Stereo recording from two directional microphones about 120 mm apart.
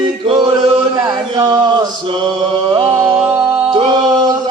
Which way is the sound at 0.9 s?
35° right (ahead or behind).